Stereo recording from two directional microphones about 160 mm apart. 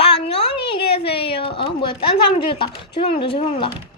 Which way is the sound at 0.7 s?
35° left (ahead or behind).